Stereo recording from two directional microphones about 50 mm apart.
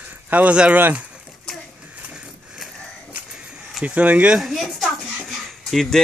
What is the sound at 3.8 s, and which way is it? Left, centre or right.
Speech, right.